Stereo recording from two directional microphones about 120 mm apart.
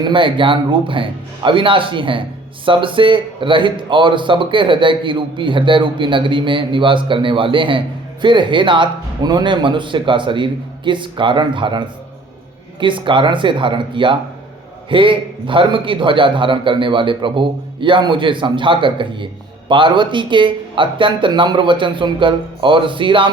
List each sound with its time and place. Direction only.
0.0 s a man's voice: 45° right (ahead or behind)